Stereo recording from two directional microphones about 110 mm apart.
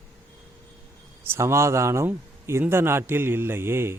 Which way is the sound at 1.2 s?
25° right (ahead or behind).